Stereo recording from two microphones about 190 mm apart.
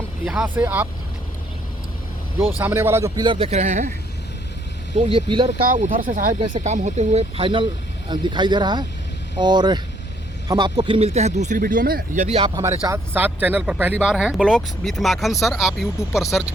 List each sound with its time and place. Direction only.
0.3 s speech: 5° right (ahead or behind)
2.6 s a man's voice: 10° right (ahead or behind); by 3.9 s 40° right (ahead or behind)
4.9 s a man's voice: 30° right (ahead or behind)
5.6 s a man's voice: 45° right (ahead or behind)
12.2 s speech: 35° right (ahead or behind)
12.9 s speech: 10° right (ahead or behind)